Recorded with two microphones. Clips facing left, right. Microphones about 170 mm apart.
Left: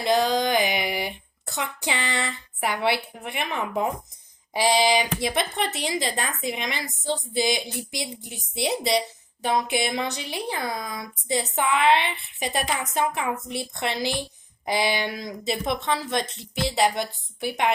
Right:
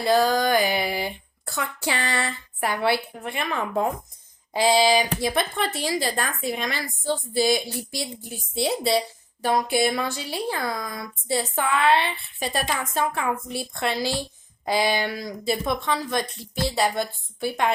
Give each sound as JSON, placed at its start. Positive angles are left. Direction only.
{"t": 0.0, "sound": "a woman's voice", "side_deg": 20}